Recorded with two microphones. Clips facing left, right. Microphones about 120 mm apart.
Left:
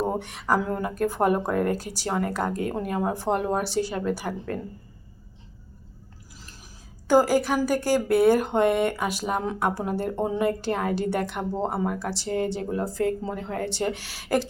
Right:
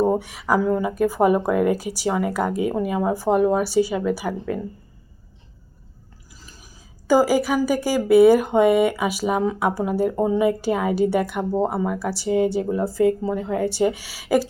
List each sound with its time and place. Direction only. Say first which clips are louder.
0.1 s speech: right 4 dB; 5° right (ahead or behind)
7.1 s speech: right 2 dB; 5° right (ahead or behind)